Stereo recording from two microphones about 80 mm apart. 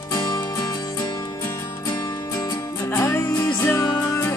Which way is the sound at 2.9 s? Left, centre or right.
Left.